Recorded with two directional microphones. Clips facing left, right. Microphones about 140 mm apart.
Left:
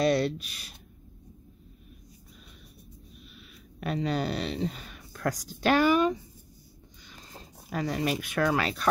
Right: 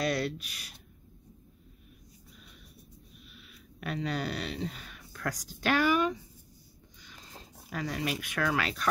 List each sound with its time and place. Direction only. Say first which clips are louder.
0.0 s speech: left 6 dB; 25° left (ahead or behind)
3.8 s speech: left 4 dB; 30° left (ahead or behind)
7.7 s speech: left 5 dB; 35° left (ahead or behind)